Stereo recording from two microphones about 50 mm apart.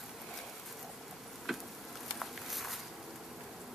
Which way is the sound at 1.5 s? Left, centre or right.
Centre.